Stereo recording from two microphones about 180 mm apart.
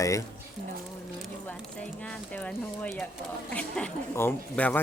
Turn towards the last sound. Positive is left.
turn(degrees=10)  # may be behind; listen again after turning